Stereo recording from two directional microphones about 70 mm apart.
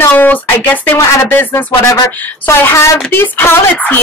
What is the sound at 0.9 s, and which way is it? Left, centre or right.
A woman's voice, left.